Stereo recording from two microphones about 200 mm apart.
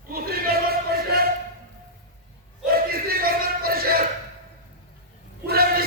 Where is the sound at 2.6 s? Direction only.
50° right (ahead or behind).